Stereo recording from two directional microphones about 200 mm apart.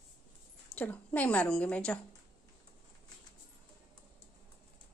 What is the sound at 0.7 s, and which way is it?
A woman's voice, 10° left (ahead or behind).